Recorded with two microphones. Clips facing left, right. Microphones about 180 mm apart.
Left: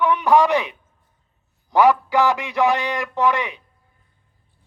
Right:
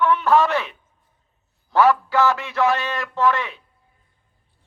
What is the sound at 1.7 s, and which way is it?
A man's voice, 15° left (ahead or behind).